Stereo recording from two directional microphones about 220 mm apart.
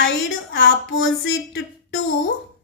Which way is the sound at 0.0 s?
60° left (ahead or behind).